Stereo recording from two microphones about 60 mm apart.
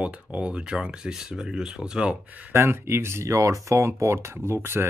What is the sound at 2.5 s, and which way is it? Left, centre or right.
Speech, right.